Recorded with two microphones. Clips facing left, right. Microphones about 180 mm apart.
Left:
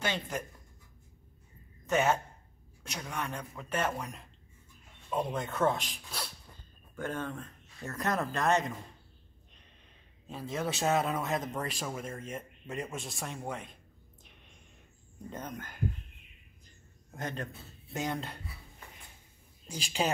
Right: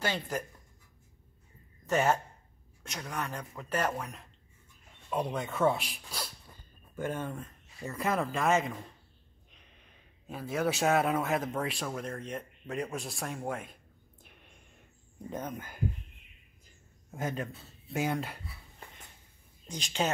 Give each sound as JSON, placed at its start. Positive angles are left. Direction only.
{"t": 1.9, "sound": "a man's voice", "side_deg": 5}
{"t": 10.2, "sound": "a man's voice", "side_deg": -5}
{"t": 15.2, "sound": "speech", "side_deg": -10}
{"t": 17.1, "sound": "speech", "side_deg": -5}
{"t": 19.7, "sound": "a woman's voice", "side_deg": 10}